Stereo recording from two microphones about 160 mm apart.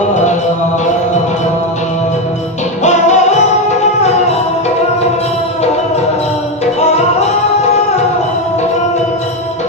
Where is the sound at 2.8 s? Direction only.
45° left (ahead or behind).